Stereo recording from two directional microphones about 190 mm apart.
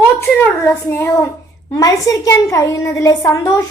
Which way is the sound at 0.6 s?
10° left (ahead or behind).